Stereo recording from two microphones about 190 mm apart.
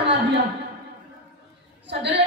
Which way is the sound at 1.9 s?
65° right (ahead or behind).